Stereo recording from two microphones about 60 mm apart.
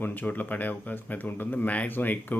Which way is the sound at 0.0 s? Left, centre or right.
Left.